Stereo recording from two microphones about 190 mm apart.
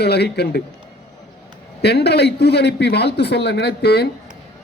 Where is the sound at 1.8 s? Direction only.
60° left (ahead or behind).